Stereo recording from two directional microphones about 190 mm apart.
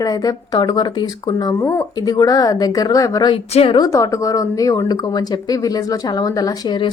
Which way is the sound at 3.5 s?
30° left (ahead or behind).